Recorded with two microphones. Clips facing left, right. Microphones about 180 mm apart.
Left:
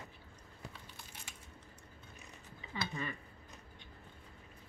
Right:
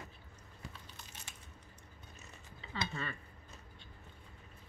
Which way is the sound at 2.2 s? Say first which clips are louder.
Even; 15° left (ahead or behind).